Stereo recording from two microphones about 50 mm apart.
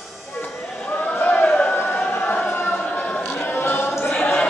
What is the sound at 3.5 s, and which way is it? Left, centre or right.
Music, left.